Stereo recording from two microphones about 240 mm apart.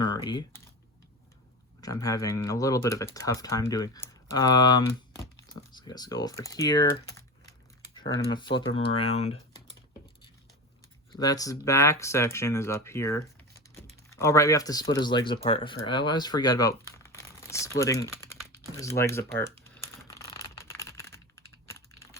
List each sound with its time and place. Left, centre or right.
0.0 s typing: centre
1.8 s speech: centre
8.3 s speech: centre
11.1 s speech: centre
18.8 s typing: centre